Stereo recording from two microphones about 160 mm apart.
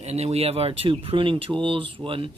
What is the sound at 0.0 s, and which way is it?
Speech, 40° right (ahead or behind).